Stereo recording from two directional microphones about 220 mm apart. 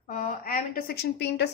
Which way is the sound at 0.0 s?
35° left (ahead or behind).